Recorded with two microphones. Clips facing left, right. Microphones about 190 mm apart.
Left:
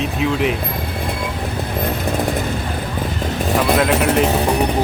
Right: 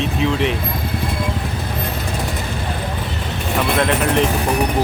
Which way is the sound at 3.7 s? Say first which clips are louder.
Left 2 dB; 5° left (ahead or behind).